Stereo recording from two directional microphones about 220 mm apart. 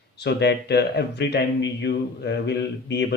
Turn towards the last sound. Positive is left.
turn(degrees=50)  # may be behind; listen again after turning